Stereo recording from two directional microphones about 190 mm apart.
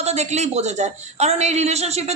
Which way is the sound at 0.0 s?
35° right (ahead or behind).